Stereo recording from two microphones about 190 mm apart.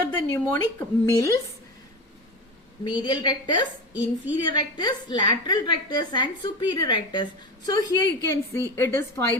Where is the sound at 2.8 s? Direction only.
25° left (ahead or behind).